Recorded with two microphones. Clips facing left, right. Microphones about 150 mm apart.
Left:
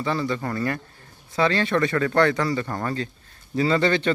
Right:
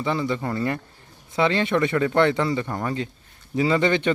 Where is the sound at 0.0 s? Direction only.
20° right (ahead or behind).